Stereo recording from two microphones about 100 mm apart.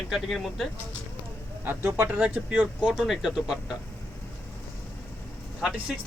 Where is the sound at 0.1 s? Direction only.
Centre (ahead or behind).